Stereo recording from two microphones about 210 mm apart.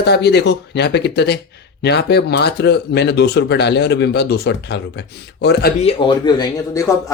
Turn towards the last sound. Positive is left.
turn(degrees=15)  # may be behind; listen again after turning